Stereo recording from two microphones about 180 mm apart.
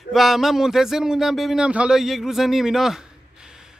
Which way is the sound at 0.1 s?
Centre (ahead or behind).